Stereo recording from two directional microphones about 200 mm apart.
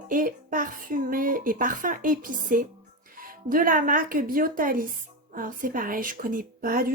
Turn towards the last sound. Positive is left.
turn(degrees=-45)  # may be behind; listen again after turning